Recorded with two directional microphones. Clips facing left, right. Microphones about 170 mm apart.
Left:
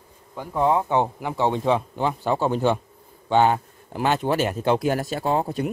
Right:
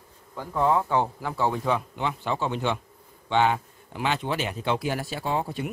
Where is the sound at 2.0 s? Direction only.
40° left (ahead or behind).